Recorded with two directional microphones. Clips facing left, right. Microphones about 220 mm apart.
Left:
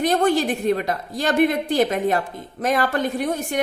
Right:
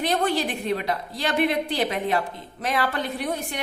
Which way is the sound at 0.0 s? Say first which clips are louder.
Left 5 dB; 45° left (ahead or behind).